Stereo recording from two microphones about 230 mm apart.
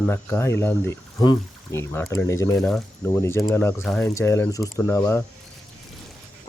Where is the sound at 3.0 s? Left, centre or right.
Centre.